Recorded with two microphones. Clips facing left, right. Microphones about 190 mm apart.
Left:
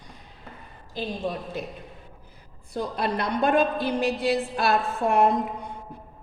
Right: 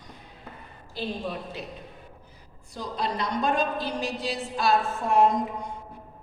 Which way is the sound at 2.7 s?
60° left (ahead or behind).